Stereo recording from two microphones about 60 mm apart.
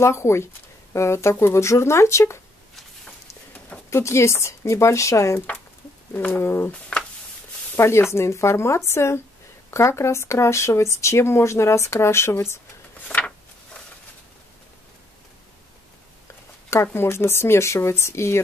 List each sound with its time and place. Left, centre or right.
0.0 s speech: left
3.9 s speech: left
6.1 s speech: left
6.7 s speech: centre
7.7 s speech: left
16.7 s speech: left